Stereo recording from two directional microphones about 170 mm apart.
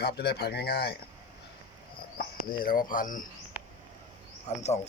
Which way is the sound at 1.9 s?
60° left (ahead or behind).